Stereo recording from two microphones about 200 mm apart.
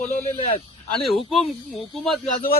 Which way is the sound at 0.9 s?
Centre (ahead or behind).